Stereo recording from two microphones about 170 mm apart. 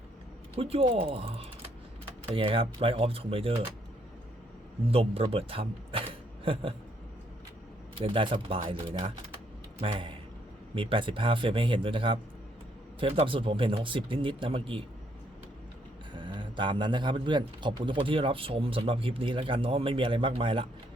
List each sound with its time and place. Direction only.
0.5 s a man's voice: 35° right (ahead or behind)
4.9 s speech: 35° right (ahead or behind)
7.9 s a man's voice: 30° right (ahead or behind)
16.1 s a man's voice: 30° right (ahead or behind)